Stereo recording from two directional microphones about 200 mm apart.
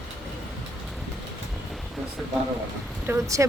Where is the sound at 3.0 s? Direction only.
15° right (ahead or behind).